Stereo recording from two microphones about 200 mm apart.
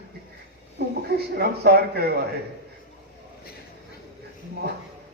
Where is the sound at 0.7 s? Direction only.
55° right (ahead or behind).